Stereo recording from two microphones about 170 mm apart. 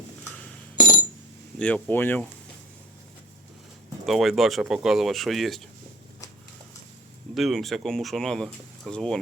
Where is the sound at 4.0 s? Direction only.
Centre (ahead or behind).